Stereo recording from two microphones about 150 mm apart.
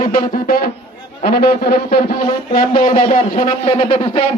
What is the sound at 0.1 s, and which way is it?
A man's voice, 80° left.